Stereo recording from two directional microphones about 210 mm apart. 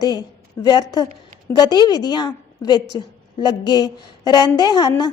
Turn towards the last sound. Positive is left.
turn(degrees=20)  # may be behind; listen again after turning